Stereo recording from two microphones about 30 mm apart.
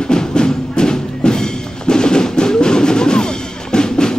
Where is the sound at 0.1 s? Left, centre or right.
Left.